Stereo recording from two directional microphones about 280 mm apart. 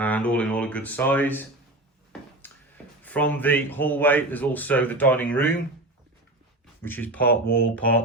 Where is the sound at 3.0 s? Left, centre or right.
Centre.